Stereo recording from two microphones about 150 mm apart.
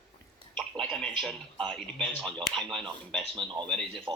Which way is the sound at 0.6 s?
5° left (ahead or behind).